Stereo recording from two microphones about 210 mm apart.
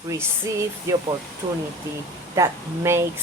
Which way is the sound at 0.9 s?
15° right (ahead or behind).